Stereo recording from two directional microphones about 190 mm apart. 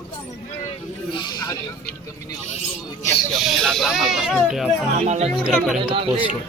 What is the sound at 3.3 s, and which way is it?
Speech, centre (ahead or behind).